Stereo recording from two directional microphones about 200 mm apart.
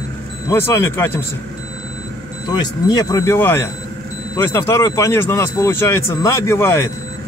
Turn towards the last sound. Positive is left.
turn(degrees=10)  # may be behind; listen again after turning